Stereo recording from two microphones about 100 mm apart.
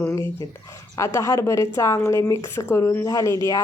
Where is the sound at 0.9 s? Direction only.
30° left (ahead or behind).